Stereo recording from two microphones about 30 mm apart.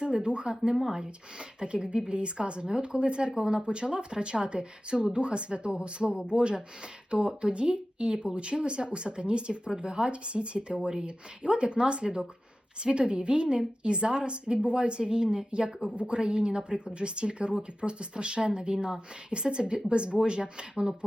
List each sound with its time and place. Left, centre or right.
0.0 s speech: right